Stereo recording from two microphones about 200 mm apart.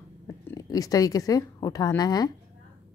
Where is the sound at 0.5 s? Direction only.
15° left (ahead or behind).